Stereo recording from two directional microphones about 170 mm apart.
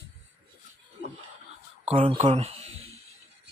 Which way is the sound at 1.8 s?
35° right (ahead or behind).